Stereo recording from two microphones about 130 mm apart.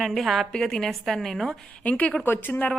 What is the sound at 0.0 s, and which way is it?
A woman's voice, centre (ahead or behind).